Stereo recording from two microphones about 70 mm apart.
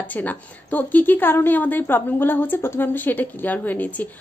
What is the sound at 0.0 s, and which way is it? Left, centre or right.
A woman's voice, left.